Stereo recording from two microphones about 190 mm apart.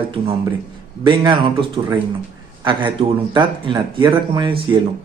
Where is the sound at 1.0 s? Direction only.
25° right (ahead or behind).